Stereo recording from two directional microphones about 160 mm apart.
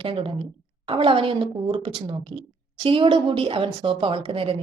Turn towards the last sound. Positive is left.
turn(degrees=-35)  # may be behind; listen again after turning